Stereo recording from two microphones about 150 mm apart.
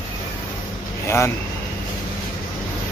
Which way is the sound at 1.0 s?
15° left (ahead or behind).